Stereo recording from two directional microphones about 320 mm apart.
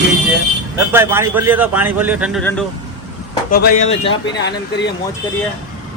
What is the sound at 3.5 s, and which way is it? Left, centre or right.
Speech, left.